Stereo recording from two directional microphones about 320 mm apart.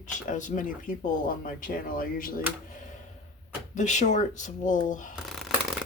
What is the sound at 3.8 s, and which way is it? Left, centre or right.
Speech, left.